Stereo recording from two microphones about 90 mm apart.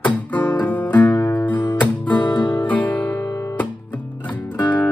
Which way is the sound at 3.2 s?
35° left (ahead or behind).